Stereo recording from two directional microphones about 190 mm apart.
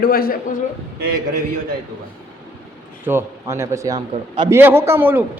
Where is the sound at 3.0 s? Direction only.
15° right (ahead or behind).